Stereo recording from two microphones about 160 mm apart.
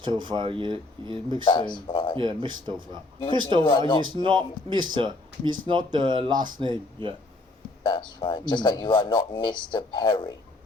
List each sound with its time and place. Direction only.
0.0 s speech: 30° right (ahead or behind)
1.5 s speech: 30° left (ahead or behind)
2.1 s speech: 30° right (ahead or behind)
3.7 s speech: 30° left (ahead or behind)
4.0 s speech: 30° right (ahead or behind)
7.9 s speech: 30° left (ahead or behind)